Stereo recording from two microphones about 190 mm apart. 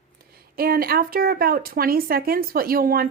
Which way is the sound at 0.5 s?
50° right (ahead or behind).